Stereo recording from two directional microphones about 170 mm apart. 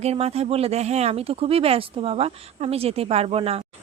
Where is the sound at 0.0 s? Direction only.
40° right (ahead or behind).